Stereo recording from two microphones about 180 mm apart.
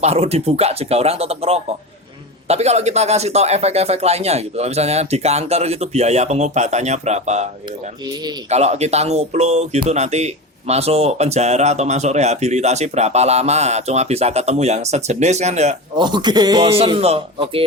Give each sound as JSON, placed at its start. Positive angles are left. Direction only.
{"t": 0.0, "sound": "speech", "side_deg": -35}
{"t": 8.4, "sound": "speech", "side_deg": -40}
{"t": 16.0, "sound": "speech", "side_deg": -25}